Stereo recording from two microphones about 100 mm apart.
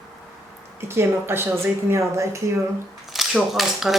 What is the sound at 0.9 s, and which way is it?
A woman's voice, 25° right (ahead or behind).